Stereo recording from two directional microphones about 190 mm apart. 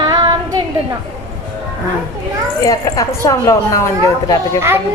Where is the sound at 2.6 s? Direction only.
15° left (ahead or behind).